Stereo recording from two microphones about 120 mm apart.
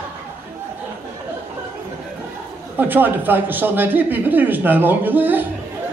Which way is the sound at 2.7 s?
15° right (ahead or behind).